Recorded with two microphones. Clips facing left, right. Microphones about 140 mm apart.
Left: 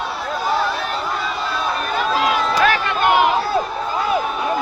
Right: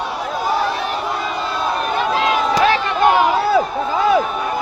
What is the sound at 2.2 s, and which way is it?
Run, 25° right (ahead or behind).